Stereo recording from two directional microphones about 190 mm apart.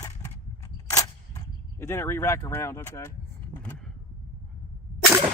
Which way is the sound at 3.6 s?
5° left (ahead or behind).